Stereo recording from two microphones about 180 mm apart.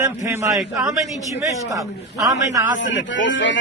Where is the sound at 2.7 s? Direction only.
90° left.